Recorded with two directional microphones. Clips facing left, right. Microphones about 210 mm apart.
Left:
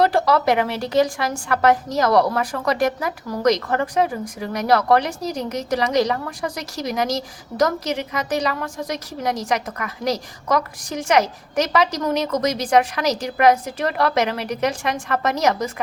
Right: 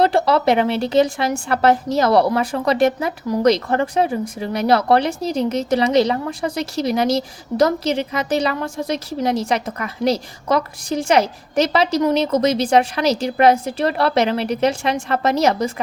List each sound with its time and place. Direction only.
0.0 s speech: 25° right (ahead or behind)